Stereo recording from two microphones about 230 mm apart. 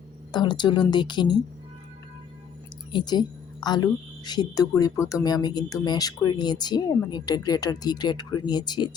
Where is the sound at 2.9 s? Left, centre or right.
Centre.